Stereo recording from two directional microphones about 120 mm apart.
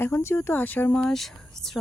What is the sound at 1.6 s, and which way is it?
Speech, 25° right (ahead or behind).